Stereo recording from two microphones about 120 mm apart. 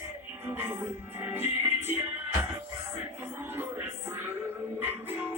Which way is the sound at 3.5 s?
15° right (ahead or behind).